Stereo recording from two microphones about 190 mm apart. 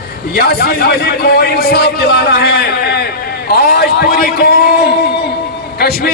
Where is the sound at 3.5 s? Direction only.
55° left (ahead or behind).